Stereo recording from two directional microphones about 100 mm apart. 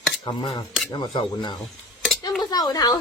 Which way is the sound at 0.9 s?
40° left (ahead or behind).